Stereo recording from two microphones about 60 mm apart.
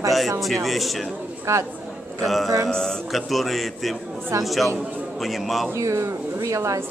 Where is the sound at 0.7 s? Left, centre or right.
Centre.